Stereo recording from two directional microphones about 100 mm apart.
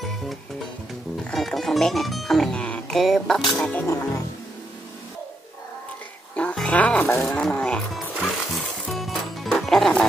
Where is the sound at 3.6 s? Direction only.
15° left (ahead or behind).